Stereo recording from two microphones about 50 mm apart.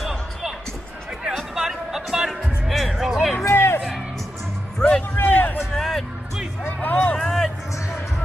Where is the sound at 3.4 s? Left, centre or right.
Left.